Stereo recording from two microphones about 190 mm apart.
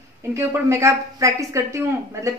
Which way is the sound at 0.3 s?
15° right (ahead or behind).